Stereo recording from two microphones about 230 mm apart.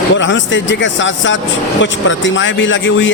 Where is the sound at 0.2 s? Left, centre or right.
Left.